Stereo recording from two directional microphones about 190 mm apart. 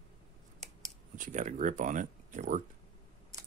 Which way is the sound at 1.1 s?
45° right (ahead or behind).